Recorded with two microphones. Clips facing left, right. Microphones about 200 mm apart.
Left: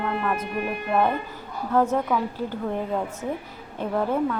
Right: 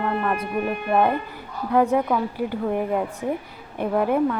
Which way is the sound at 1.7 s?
15° right (ahead or behind).